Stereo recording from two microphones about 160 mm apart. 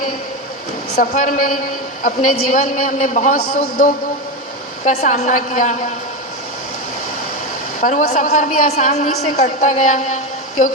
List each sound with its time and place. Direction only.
0.9 s a woman's voice: 55° left (ahead or behind)
4.9 s a man's voice: 45° left (ahead or behind)
7.8 s a man's voice: 55° left (ahead or behind)